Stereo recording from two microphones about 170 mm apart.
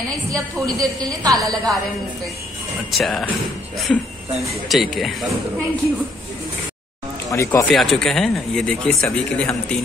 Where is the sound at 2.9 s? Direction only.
Centre (ahead or behind).